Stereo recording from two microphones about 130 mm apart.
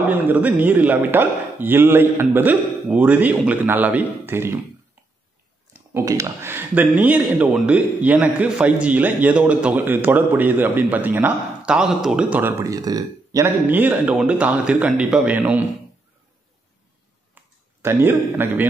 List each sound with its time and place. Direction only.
0.1 s speech: 15° right (ahead or behind)
5.7 s speech: 20° right (ahead or behind)
13.7 s speech: 15° right (ahead or behind)
17.8 s speech: 20° right (ahead or behind)